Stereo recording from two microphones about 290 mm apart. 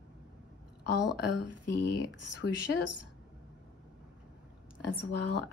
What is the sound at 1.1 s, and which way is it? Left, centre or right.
Mantra, left.